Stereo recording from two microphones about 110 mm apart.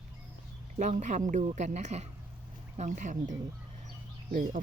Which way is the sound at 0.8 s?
90° right.